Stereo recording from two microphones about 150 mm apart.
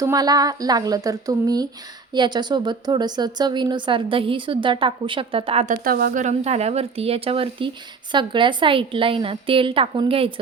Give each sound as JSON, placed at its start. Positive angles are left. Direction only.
{"t": 0.0, "sound": "speech", "side_deg": -25}
{"t": 5.6, "sound": "speech", "side_deg": -65}